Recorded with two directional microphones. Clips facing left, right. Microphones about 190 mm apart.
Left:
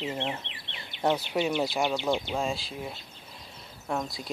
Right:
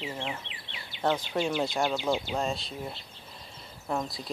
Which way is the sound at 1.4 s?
5° left (ahead or behind).